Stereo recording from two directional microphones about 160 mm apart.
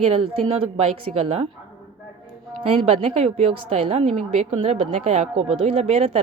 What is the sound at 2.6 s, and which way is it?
A woman's voice, 35° right (ahead or behind).